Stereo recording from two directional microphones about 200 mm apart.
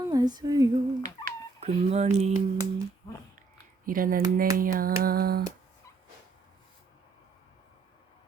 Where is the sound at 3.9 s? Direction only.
45° right (ahead or behind).